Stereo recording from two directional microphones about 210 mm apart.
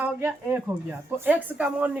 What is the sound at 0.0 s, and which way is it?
Speech, 10° right (ahead or behind).